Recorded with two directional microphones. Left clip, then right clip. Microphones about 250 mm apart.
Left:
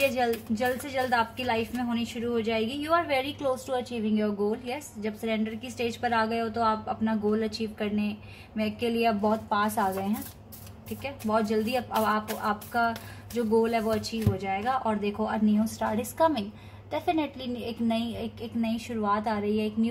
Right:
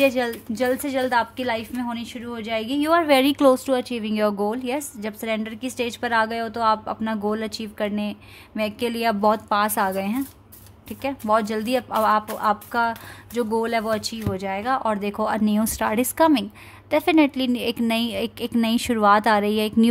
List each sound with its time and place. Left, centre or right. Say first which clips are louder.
0.0 s a woman's voice: right 5 dB; right